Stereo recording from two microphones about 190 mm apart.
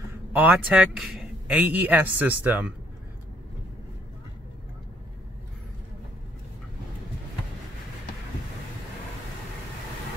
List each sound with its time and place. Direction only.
0.0 s a man's voice: 10° right (ahead or behind)